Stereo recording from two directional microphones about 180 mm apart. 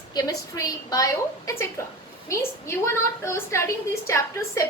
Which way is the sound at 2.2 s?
15° left (ahead or behind).